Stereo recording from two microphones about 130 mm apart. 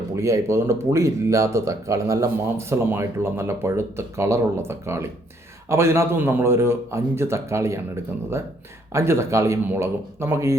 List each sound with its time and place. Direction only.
0.2 s speech: 20° right (ahead or behind)
8.9 s speech: 20° right (ahead or behind)